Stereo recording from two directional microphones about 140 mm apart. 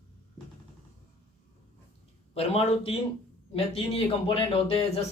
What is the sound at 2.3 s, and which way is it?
Speech, 45° left (ahead or behind).